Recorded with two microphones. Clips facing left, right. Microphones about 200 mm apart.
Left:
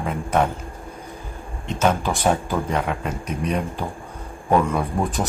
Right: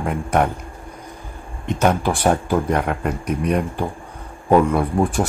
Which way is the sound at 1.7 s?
10° right (ahead or behind).